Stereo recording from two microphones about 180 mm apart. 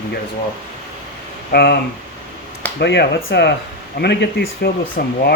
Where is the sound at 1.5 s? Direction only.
65° left (ahead or behind).